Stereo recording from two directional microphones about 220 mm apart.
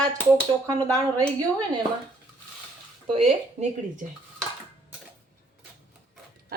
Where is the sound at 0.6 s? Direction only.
15° right (ahead or behind).